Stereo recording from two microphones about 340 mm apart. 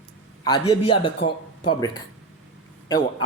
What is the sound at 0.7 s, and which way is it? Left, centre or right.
Speech, centre.